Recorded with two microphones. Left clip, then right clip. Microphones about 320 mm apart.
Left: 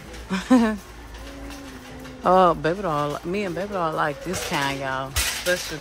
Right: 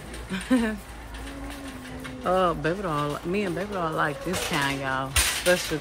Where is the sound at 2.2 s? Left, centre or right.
Centre.